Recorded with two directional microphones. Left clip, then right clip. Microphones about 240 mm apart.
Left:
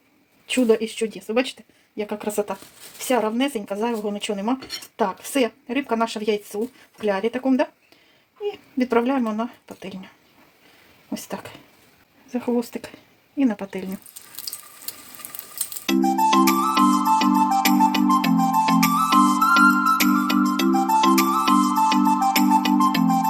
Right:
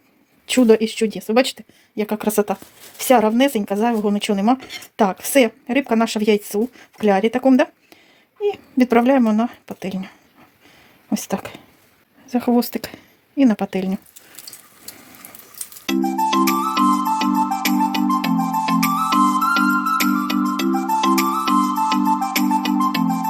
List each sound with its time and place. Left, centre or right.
0.4 s a woman's voice: right
11.1 s speech: right
15.9 s music: centre